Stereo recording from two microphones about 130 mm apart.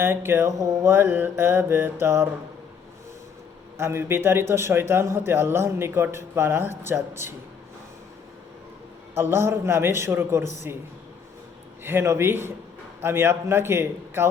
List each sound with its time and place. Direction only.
0.0 s mantra: 15° right (ahead or behind)
3.8 s a man's voice: 20° right (ahead or behind)
9.1 s a man's voice: 20° right (ahead or behind)
11.8 s mantra: 15° right (ahead or behind)
13.0 s a man's voice: 20° right (ahead or behind)